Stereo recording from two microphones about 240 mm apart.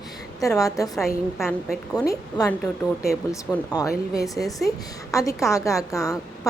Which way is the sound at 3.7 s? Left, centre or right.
Centre.